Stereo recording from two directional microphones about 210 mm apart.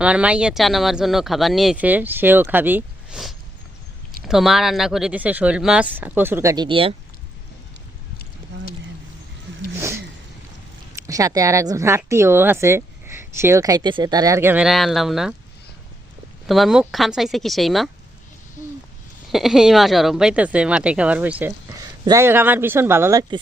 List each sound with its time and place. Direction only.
0.0 s speech: 5° right (ahead or behind); by 6.9 s 25° right (ahead or behind)
11.0 s speech: 15° right (ahead or behind)
16.5 s speech: centre (ahead or behind)
19.3 s speech: centre (ahead or behind)